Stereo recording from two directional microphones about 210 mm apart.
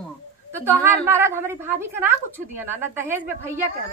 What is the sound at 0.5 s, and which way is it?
A woman's voice, 10° right (ahead or behind).